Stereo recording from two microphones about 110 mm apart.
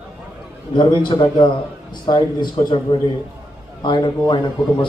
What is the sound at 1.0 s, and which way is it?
A man's voice, 45° left (ahead or behind).